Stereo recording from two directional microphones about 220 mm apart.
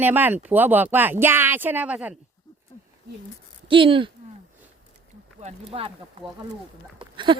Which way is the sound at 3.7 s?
25° right (ahead or behind).